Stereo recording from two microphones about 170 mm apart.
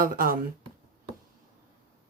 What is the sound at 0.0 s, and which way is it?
Speech, 55° right (ahead or behind).